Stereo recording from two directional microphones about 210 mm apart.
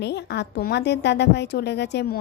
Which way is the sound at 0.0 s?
55° left (ahead or behind).